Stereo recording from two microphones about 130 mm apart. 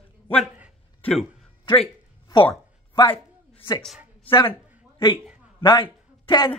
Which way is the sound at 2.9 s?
35° left (ahead or behind).